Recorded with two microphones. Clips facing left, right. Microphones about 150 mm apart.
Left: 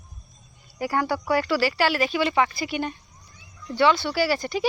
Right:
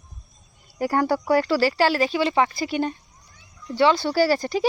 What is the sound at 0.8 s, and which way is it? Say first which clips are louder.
Speech: right 3 dB; 40° right (ahead or behind).